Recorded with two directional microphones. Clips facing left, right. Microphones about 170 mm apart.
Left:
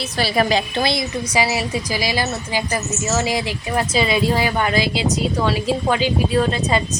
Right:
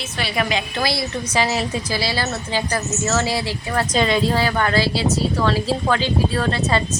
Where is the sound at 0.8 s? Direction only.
20° left (ahead or behind).